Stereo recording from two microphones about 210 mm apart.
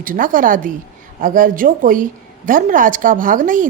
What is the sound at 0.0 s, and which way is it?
A woman's voice, 40° right (ahead or behind).